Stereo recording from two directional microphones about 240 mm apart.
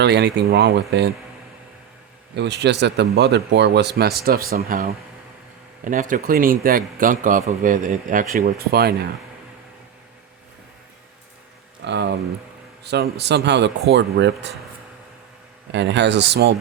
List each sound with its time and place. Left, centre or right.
0.0 s speech: right
2.3 s a man's voice: right
11.9 s speech: right
15.7 s speech: right